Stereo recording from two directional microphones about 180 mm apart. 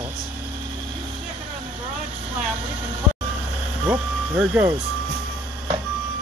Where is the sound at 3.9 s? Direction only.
10° right (ahead or behind).